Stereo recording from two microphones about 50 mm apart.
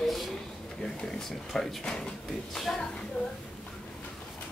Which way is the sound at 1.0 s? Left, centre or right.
Centre.